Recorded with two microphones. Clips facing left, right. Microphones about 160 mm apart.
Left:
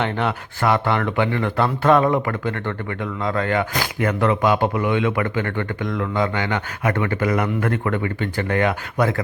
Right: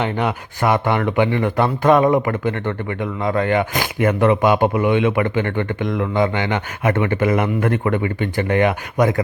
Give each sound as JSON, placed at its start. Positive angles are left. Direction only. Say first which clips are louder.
{"t": 0.0, "sound": "speech", "louder": "right 2 dB", "side_deg": -10}